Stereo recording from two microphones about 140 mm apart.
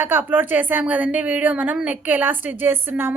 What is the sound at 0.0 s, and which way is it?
A woman's voice, 15° right (ahead or behind).